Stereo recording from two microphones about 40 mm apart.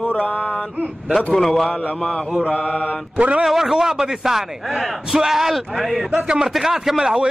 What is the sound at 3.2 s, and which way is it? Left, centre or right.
Speech, right.